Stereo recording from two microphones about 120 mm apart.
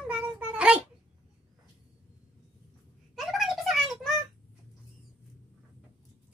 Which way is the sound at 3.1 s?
Centre (ahead or behind).